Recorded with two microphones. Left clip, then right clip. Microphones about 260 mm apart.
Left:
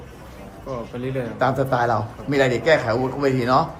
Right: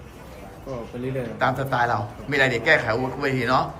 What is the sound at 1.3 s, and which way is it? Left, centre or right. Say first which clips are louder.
A man's voice: left 2 dB; centre.